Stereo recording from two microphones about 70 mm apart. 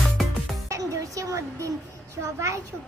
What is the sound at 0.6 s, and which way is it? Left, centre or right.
Music, right.